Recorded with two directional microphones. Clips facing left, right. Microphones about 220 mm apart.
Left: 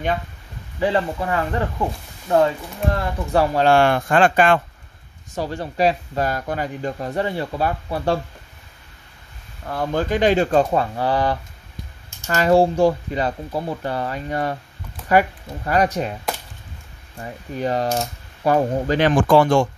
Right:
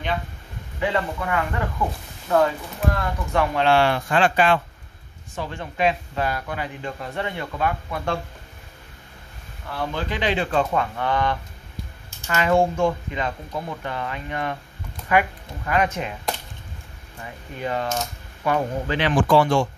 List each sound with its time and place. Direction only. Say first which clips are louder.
0.7 s speech: left 4 dB; 30° left (ahead or behind); by 4.6 s 50° left (ahead or behind)
5.3 s speech: left 5 dB; 40° left (ahead or behind)
9.7 s speech: left 6 dB; 45° left (ahead or behind)
17.6 s speech: left 4 dB; 40° left (ahead or behind)